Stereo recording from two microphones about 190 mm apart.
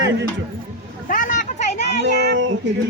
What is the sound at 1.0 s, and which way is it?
Speech, 45° left (ahead or behind).